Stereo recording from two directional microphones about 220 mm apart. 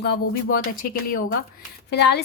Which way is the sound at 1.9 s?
50° left (ahead or behind).